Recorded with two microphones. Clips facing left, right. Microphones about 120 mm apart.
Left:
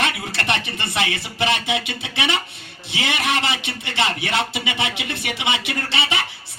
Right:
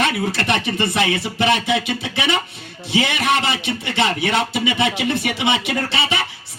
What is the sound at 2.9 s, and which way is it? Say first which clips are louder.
Speech: right 4 dB; 45° right (ahead or behind).